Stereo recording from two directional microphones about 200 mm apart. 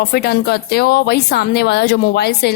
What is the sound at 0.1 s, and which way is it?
A woman's voice, 50° left (ahead or behind).